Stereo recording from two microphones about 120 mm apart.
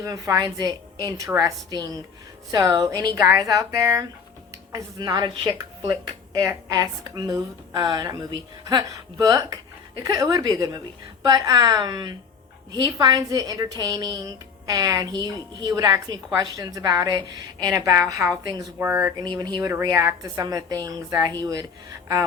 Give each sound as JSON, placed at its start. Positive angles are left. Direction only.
{"t": 0.0, "sound": "a woman's voice", "side_deg": -30}
{"t": 6.4, "sound": "a woman's voice", "side_deg": -30}
{"t": 18.8, "sound": "speech", "side_deg": -20}
{"t": 19.4, "sound": "a woman's voice", "side_deg": -35}